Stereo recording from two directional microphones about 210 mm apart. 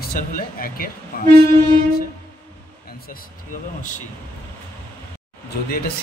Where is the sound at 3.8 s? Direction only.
35° left (ahead or behind).